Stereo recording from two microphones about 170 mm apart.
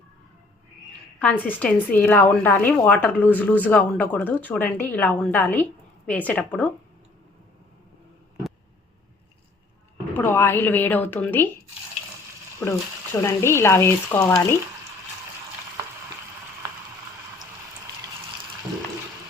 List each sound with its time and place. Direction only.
1.2 s a woman's voice: 10° left (ahead or behind)
10.2 s a woman's voice: 15° left (ahead or behind)
12.6 s a woman's voice: 15° left (ahead or behind)